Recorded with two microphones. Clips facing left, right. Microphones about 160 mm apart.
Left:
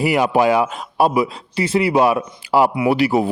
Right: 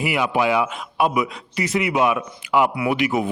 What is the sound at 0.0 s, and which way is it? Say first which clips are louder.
A man's voice: left 5 dB; 40° left (ahead or behind).